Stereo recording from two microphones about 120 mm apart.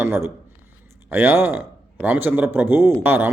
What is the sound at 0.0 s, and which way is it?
A man's voice, 20° right (ahead or behind).